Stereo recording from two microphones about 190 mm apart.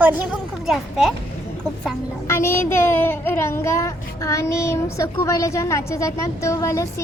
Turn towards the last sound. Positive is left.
turn(degrees=15)  # may be behind; listen again after turning